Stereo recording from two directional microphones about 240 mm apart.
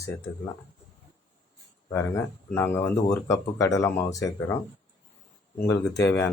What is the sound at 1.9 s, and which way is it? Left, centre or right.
Speech, centre.